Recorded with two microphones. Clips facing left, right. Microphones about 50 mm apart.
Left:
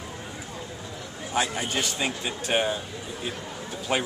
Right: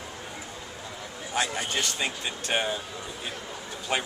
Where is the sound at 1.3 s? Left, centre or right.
Centre.